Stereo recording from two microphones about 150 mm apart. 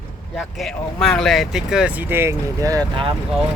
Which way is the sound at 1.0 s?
5° left (ahead or behind).